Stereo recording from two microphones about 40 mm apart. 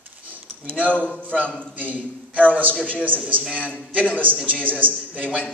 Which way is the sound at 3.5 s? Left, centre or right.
Left.